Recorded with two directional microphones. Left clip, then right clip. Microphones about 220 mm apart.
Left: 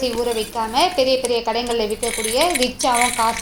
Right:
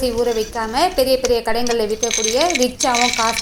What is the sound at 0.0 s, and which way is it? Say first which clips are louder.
A woman's voice: right 3 dB; 20° right (ahead or behind).